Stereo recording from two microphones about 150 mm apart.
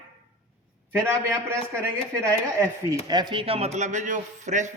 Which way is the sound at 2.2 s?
20° right (ahead or behind).